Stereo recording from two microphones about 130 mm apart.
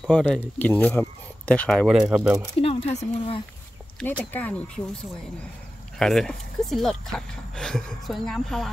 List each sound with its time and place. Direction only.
0.1 s speech: 10° left (ahead or behind)
1.9 s speech: 5° right (ahead or behind)
2.6 s speech: 55° left (ahead or behind)
4.0 s speech: 10° left (ahead or behind)
5.9 s speech: 5° left (ahead or behind)